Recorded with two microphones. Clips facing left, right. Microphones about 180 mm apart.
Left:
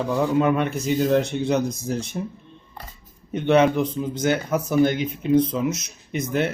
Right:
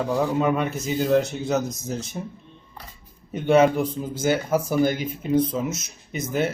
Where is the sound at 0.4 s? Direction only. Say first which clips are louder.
Left 2 dB; centre (ahead or behind).